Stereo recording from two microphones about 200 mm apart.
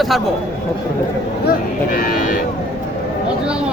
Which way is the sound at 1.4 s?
45° left (ahead or behind).